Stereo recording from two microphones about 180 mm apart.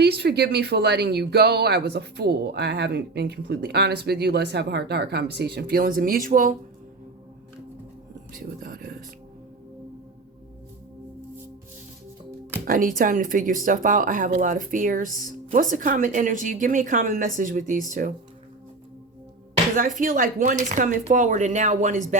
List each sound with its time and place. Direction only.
0.0 s speech: 65° right (ahead or behind)
8.6 s speech: 55° right (ahead or behind)
12.6 s speech: 50° right (ahead or behind)
20.0 s speech: 50° right (ahead or behind)